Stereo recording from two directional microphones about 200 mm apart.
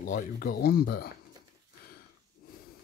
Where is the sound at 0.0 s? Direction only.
45° left (ahead or behind).